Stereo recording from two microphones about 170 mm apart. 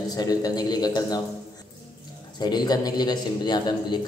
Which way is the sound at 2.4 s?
25° left (ahead or behind).